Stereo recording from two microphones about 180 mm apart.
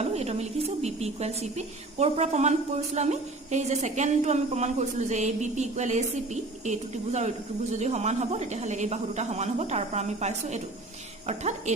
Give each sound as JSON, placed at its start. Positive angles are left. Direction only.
{"t": 0.0, "sound": "speech", "side_deg": -35}